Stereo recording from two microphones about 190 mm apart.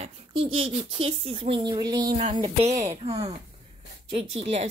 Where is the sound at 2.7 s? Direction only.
35° right (ahead or behind).